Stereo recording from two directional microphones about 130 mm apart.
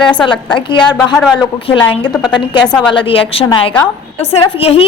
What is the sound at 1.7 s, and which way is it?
Speech, 40° left (ahead or behind).